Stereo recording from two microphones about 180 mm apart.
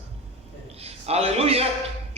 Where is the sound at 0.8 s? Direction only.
35° right (ahead or behind).